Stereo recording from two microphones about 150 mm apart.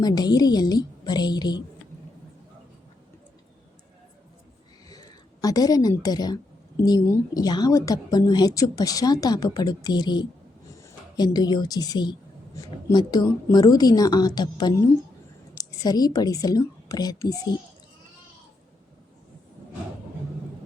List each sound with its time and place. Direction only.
0.0 s a woman's voice: 25° left (ahead or behind)
4.9 s a woman's voice: 25° left (ahead or behind)